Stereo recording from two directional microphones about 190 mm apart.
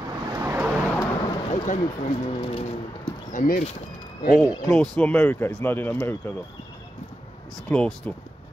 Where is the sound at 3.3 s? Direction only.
45° left (ahead or behind).